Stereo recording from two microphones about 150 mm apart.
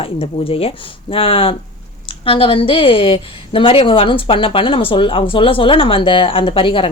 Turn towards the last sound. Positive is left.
turn(degrees=35)  # may be behind; listen again after turning